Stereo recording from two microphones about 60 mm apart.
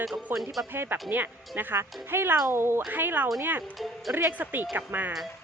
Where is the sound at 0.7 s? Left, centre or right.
Right.